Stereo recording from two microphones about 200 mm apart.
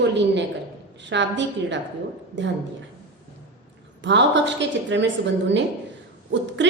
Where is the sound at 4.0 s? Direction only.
60° right (ahead or behind).